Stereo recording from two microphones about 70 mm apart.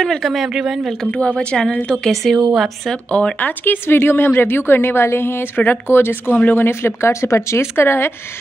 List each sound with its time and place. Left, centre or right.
0.0 s speech: centre
1.1 s a woman's voice: centre
2.0 s speech: centre
3.1 s speech: centre; by 8.1 s left